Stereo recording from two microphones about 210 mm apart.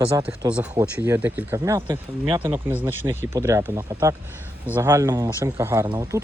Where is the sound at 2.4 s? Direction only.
10° right (ahead or behind).